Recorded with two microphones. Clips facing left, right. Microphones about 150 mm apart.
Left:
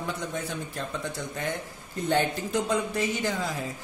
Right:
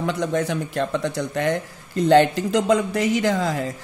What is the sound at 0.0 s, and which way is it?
Speech, 80° right.